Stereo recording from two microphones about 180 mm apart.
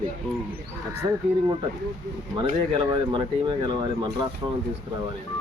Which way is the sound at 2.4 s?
25° right (ahead or behind).